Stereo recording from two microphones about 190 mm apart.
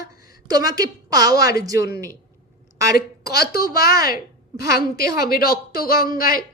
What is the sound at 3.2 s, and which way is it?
Speech, 55° left (ahead or behind).